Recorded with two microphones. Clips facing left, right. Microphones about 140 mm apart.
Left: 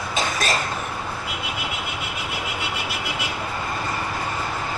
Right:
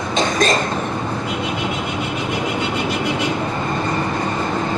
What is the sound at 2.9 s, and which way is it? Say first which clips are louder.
Vehicle: right 9 dB; 5° left (ahead or behind).